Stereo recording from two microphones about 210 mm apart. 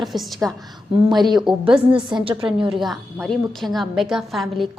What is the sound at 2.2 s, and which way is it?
Speech, 25° right (ahead or behind).